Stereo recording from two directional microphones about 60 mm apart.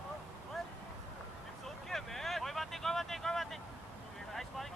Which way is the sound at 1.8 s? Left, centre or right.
Centre.